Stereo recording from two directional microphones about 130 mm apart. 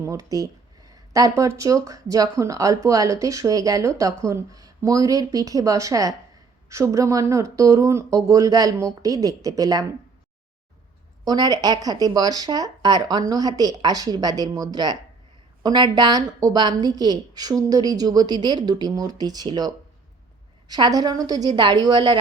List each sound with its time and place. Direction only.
0.0 s speech: 25° right (ahead or behind)
11.3 s a woman's voice: 30° right (ahead or behind)